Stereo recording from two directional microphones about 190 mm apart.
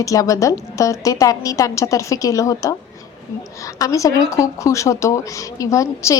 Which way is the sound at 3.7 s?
15° left (ahead or behind).